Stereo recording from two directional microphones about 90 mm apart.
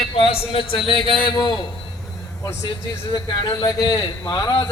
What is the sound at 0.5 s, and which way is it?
Speech, 65° left (ahead or behind).